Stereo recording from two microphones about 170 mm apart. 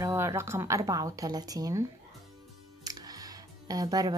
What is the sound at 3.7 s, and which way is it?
Speech, 20° right (ahead or behind).